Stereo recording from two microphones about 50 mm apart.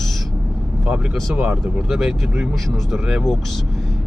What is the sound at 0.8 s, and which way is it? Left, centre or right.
Speech, right.